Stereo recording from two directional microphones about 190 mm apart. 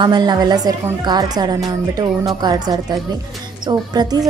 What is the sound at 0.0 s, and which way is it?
A woman's voice, 20° right (ahead or behind).